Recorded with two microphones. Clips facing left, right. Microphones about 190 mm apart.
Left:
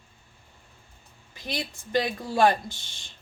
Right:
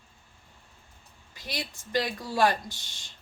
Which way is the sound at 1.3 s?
20° left (ahead or behind).